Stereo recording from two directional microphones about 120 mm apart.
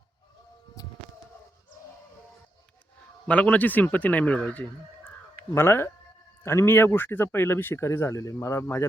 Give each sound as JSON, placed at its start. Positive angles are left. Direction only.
{"t": 0.8, "sound": "insect", "side_deg": 30}
{"t": 3.2, "sound": "speech", "side_deg": 10}